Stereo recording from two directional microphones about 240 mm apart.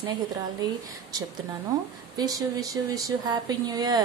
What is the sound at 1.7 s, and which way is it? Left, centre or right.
Speech, centre.